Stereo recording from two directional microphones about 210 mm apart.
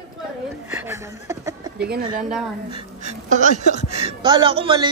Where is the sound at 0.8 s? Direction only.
15° right (ahead or behind).